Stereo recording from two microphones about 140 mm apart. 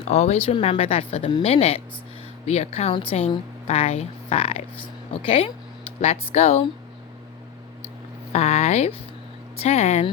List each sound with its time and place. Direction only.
0.0 s a woman's voice: 50° left (ahead or behind)
8.3 s a woman's voice: 50° left (ahead or behind)